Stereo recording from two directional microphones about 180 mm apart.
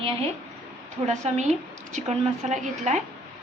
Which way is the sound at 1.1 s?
40° right (ahead or behind).